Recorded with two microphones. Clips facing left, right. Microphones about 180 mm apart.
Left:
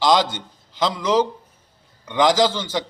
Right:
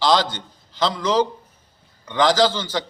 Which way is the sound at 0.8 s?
15° left (ahead or behind).